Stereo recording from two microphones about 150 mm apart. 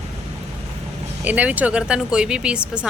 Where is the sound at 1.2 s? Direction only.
10° right (ahead or behind).